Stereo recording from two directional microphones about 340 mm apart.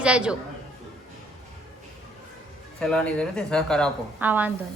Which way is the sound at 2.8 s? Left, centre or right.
Centre.